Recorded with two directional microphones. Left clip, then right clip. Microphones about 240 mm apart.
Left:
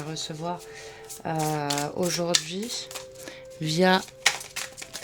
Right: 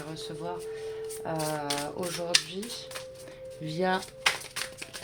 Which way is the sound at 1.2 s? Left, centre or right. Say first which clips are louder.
Left 5 dB; left.